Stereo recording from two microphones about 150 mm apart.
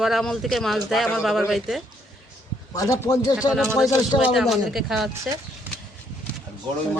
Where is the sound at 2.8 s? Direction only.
20° left (ahead or behind).